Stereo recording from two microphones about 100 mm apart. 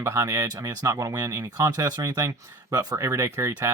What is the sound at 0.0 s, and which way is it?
Speech, 30° right (ahead or behind).